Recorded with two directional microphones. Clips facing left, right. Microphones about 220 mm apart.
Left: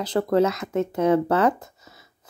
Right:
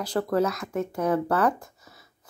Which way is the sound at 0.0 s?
20° left (ahead or behind).